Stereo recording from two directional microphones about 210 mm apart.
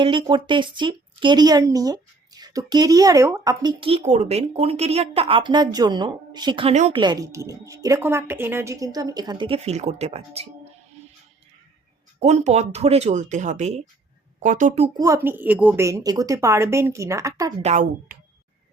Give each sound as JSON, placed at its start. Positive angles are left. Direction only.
{"t": 0.0, "sound": "speech", "side_deg": -25}
{"t": 7.0, "sound": "a woman's voice", "side_deg": -20}
{"t": 12.2, "sound": "speech", "side_deg": -30}
{"t": 14.9, "sound": "a woman's voice", "side_deg": -15}
{"t": 17.6, "sound": "speech", "side_deg": -35}